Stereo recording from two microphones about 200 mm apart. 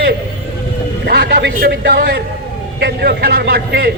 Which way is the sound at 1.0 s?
50° right (ahead or behind).